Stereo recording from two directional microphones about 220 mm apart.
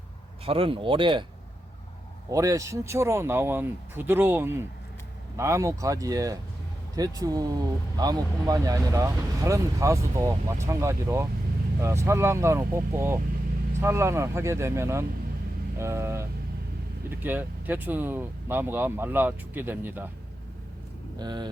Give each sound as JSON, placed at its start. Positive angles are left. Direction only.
{"t": 0.4, "sound": "speech", "side_deg": -25}
{"t": 2.3, "sound": "speech", "side_deg": -15}
{"t": 21.2, "sound": "speech", "side_deg": -20}